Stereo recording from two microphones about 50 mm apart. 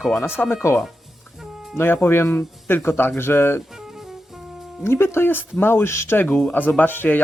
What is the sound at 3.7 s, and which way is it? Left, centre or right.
Music, centre.